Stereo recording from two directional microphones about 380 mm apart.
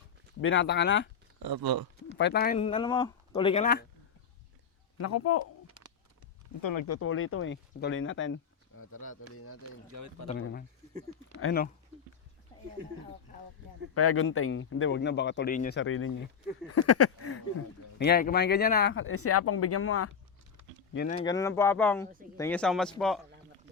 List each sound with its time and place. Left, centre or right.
0.4 s speech: left
1.4 s speech: right
2.1 s speech: left
4.9 s speech: left
6.6 s speech: left
6.8 s speech: left
9.9 s speech: right
10.4 s speech: left
13.9 s speech: left
18.0 s speech: left
20.9 s speech: left; by 23.2 s centre